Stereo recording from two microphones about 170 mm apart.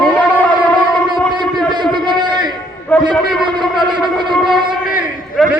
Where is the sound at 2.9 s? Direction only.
10° left (ahead or behind).